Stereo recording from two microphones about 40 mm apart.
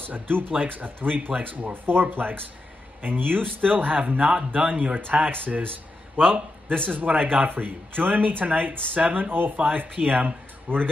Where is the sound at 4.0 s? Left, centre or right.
Right.